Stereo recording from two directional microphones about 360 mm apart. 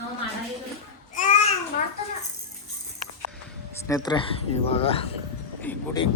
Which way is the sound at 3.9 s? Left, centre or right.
Centre.